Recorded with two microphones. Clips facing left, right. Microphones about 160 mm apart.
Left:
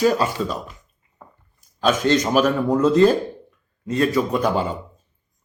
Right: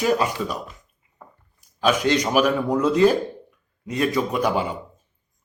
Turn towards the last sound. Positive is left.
turn(degrees=-15)  # may be behind; listen again after turning